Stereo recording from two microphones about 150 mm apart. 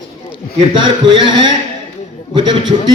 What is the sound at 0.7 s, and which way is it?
A man's voice, 30° right (ahead or behind).